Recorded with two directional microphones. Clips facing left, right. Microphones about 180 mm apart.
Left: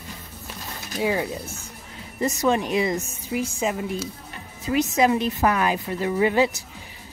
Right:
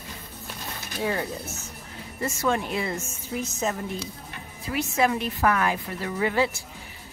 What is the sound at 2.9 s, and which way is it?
Speech, 35° left (ahead or behind).